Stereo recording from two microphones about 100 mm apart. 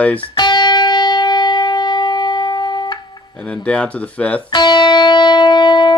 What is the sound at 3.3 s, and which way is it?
Speech, 10° left (ahead or behind).